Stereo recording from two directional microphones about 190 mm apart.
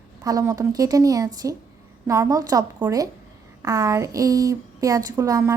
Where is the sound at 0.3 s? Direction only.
20° right (ahead or behind).